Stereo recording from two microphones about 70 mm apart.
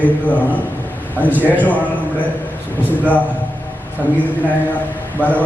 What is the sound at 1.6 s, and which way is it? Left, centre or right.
Speech, left.